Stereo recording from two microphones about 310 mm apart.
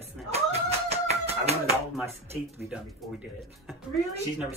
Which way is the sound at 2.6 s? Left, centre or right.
Centre.